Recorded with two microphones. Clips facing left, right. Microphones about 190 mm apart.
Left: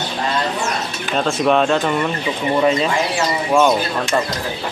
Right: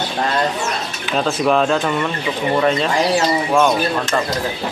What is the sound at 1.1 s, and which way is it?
Speech, centre (ahead or behind).